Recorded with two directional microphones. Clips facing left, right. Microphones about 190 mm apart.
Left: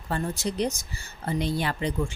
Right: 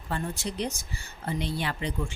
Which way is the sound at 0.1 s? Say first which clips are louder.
Left 4 dB; 40° left (ahead or behind).